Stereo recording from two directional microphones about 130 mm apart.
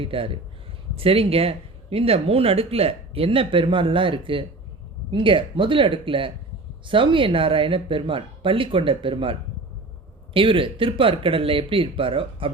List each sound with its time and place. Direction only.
0.0 s speech: 45° right (ahead or behind)